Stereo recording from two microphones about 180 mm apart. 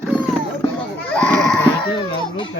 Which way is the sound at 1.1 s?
5° left (ahead or behind).